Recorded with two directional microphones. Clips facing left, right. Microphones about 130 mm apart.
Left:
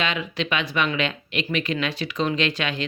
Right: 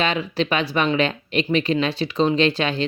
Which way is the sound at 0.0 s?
35° right (ahead or behind).